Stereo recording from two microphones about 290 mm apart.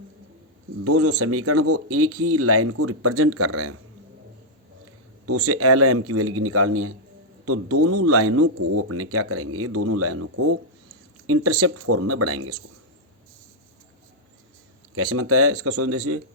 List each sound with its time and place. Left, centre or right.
0.9 s speech: right
5.2 s speech: right
14.9 s speech: right